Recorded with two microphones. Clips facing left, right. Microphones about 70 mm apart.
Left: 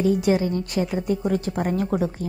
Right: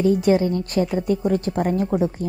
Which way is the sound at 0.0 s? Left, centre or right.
Right.